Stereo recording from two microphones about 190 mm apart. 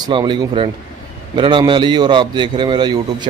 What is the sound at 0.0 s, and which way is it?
Speech, 25° right (ahead or behind).